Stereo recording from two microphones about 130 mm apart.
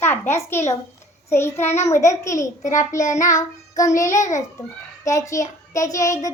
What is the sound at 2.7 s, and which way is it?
Speech, 70° left (ahead or behind).